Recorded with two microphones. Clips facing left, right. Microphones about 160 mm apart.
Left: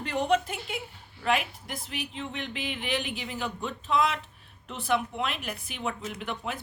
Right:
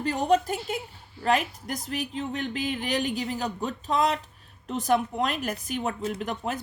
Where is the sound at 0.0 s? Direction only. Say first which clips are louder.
Right 3 dB; 35° right (ahead or behind).